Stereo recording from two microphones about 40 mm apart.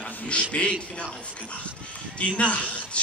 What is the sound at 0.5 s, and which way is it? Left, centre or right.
Speech, left.